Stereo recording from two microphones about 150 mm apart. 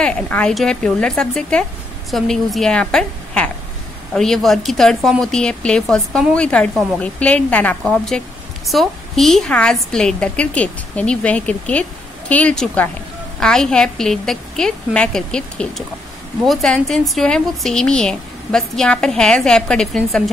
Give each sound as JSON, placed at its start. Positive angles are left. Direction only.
{"t": 0.0, "sound": "a woman's voice", "side_deg": 5}